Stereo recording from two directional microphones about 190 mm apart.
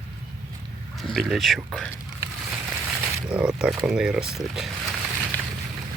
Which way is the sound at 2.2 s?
15° right (ahead or behind).